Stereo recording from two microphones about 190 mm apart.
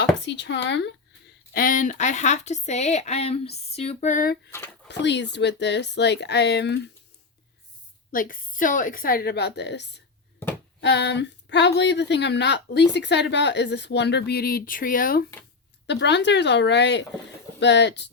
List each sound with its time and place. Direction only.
0.0 s speech: 65° left (ahead or behind)
1.5 s a woman's voice: 45° left (ahead or behind)
4.9 s a woman's voice: 65° left (ahead or behind)
8.1 s a woman's voice: 45° left (ahead or behind); by 10.0 s 65° left (ahead or behind)
10.4 s a sound: 10° left (ahead or behind)
10.8 s a woman's voice: 65° left (ahead or behind); by 15.2 s 45° left (ahead or behind)
15.9 s a woman's voice: 65° left (ahead or behind)